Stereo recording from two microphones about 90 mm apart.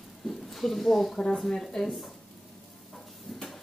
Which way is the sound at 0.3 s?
Centre (ahead or behind).